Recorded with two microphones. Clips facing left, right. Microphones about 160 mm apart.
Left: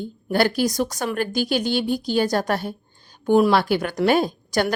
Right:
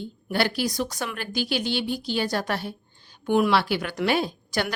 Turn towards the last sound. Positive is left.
turn(degrees=45)  # may be behind; listen again after turning